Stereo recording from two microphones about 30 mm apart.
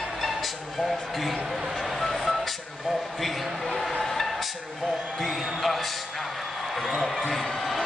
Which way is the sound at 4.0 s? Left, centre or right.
Centre.